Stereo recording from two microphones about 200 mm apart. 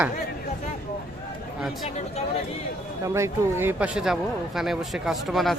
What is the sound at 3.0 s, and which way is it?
Speech, 15° right (ahead or behind).